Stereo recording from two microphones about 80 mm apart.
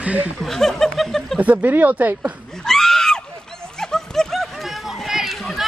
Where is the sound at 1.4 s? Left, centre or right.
Centre.